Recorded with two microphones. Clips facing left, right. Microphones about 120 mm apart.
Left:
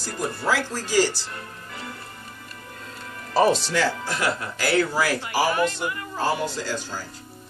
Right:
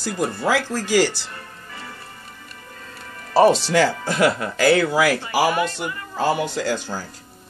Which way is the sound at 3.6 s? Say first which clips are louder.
Right 5 dB; 85° right.